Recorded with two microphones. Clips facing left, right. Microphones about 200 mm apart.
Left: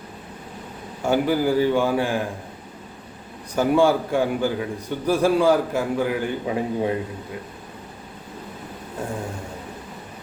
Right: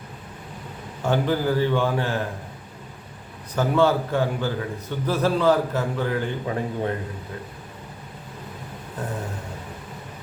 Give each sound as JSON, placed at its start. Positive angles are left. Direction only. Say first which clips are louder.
{"t": 1.0, "sound": "a man's voice", "louder": "left 2 dB", "side_deg": 10}
{"t": 3.5, "sound": "a man's voice", "louder": "left 2 dB", "side_deg": 10}